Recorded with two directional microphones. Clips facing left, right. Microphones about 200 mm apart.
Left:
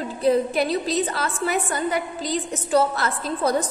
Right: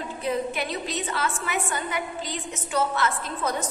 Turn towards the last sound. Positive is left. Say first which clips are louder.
# left 6 dB
turn(degrees=35)  # may be behind; listen again after turning